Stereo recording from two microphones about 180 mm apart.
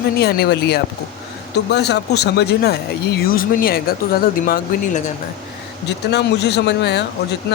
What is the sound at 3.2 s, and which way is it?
Speech, 55° left (ahead or behind).